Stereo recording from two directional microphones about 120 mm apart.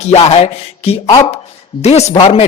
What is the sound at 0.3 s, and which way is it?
Speech, 60° left (ahead or behind).